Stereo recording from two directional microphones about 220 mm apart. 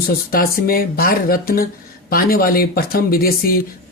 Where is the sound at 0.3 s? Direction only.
40° left (ahead or behind).